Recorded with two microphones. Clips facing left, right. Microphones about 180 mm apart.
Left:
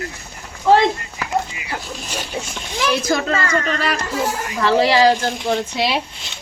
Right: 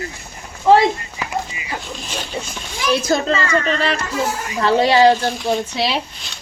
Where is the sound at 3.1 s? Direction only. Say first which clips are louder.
Right 1 dB; 30° right (ahead or behind).